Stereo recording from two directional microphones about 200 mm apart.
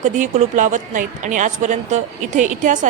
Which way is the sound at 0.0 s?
40° right (ahead or behind).